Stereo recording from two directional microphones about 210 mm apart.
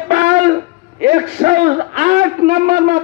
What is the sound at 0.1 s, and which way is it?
A man's voice, 40° right (ahead or behind).